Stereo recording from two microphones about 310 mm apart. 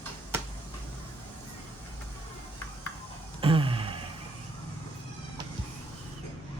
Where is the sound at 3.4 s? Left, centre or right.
Centre.